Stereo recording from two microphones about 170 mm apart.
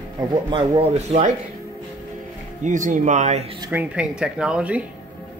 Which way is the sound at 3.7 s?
10° right (ahead or behind).